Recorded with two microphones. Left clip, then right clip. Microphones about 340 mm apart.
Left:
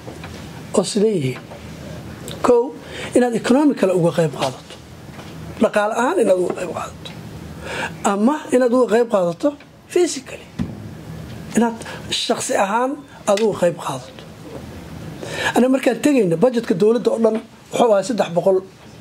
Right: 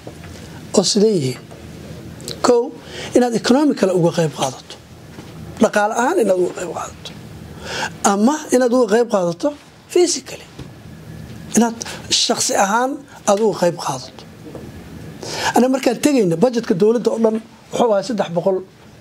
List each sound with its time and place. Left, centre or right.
0.7 s a woman's voice: right
2.4 s a woman's voice: right
5.6 s a woman's voice: right
12.3 s speech: right
15.2 s a woman's voice: right